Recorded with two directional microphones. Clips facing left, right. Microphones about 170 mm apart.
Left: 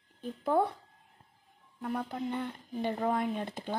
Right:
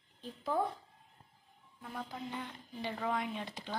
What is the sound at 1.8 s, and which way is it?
Speech, 60° left (ahead or behind).